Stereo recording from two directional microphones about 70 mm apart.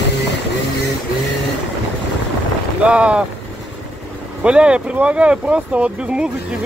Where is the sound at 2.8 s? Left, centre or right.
Centre.